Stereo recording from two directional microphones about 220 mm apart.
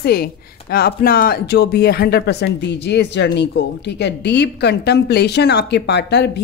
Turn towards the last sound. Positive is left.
turn(degrees=50)  # may be behind; listen again after turning